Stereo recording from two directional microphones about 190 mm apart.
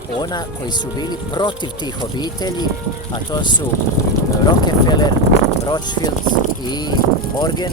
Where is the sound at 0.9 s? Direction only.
20° left (ahead or behind).